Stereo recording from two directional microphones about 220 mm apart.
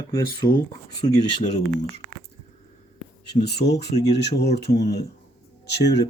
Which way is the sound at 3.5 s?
50° left (ahead or behind).